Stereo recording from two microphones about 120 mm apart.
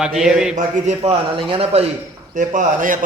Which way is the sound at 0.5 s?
75° right (ahead or behind).